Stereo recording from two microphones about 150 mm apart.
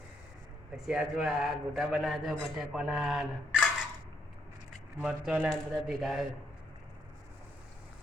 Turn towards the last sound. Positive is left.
turn(degrees=0)  # may be behind; listen again after turning